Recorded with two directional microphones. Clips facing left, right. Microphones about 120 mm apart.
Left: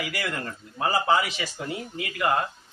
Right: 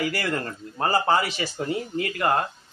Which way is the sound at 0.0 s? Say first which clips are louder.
Right 4 dB; 40° right (ahead or behind).